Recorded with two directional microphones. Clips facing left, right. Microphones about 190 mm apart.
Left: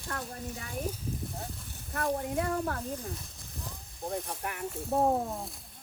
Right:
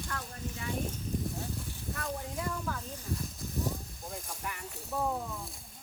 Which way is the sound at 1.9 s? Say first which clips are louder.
Left 8 dB; 55° left (ahead or behind).